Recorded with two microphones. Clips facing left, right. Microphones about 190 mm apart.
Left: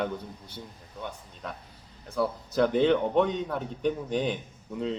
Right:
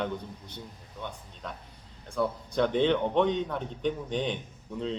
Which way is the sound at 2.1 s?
5° left (ahead or behind).